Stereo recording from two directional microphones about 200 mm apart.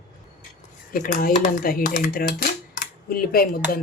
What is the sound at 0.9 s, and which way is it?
Speech, 45° left (ahead or behind).